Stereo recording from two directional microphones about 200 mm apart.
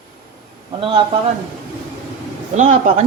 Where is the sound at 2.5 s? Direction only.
35° right (ahead or behind).